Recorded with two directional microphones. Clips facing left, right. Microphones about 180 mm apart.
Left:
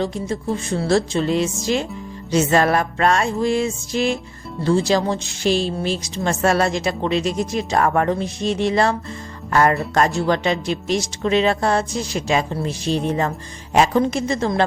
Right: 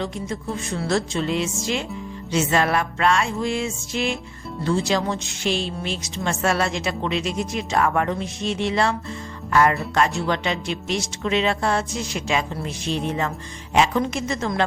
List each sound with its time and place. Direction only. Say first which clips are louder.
0.0 s a woman's voice: left 5 dB; 35° left (ahead or behind)